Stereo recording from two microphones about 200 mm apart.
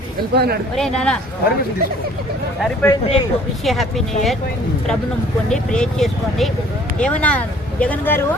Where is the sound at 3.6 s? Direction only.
Centre (ahead or behind).